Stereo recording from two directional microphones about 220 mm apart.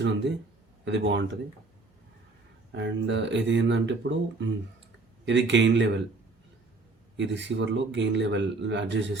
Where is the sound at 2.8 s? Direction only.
55° right (ahead or behind).